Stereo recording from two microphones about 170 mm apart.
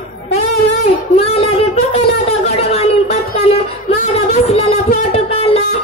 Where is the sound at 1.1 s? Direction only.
35° left (ahead or behind).